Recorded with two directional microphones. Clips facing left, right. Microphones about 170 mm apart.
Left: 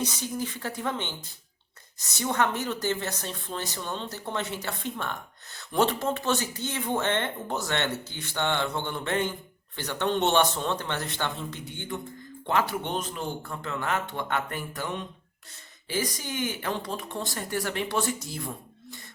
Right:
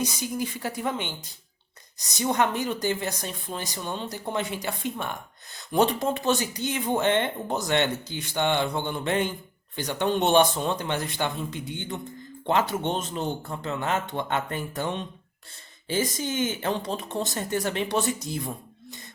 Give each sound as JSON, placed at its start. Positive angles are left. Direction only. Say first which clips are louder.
{"t": 0.0, "sound": "speech", "louder": "right 2 dB", "side_deg": -10}